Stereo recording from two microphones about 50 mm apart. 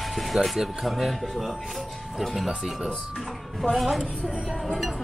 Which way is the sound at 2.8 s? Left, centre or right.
Centre.